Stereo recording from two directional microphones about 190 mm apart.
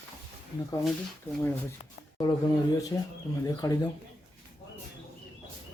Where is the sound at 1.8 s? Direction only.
20° left (ahead or behind).